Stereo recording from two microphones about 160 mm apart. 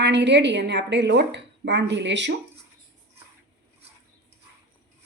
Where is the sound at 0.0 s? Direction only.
90° right.